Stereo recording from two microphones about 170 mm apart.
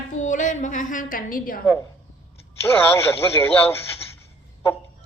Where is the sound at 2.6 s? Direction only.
15° left (ahead or behind).